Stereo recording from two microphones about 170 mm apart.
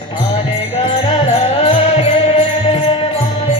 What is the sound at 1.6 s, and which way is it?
Music, 35° left (ahead or behind).